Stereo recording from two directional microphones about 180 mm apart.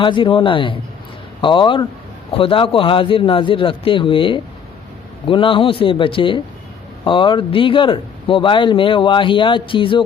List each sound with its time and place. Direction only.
0.0 s speech: 30° left (ahead or behind)